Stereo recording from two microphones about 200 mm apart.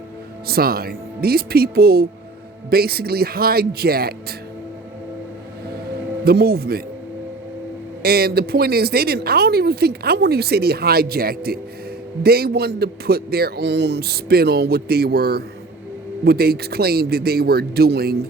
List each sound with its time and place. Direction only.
0.4 s speech: 50° right (ahead or behind)
6.2 s speech: 50° right (ahead or behind)
8.0 s speech: 50° right (ahead or behind)